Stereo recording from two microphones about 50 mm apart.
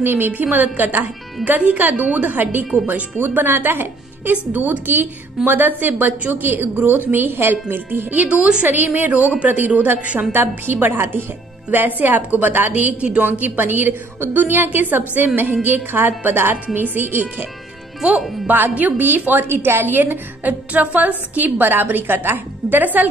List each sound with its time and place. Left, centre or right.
0.0 s a woman's voice: right
2.0 s a woman's voice: right
2.3 s a woman's voice: right
8.3 s a woman's voice: right
8.6 s a woman's voice: right
10.3 s a woman's voice: right
18.5 s a woman's voice: right
21.4 s a woman's voice: right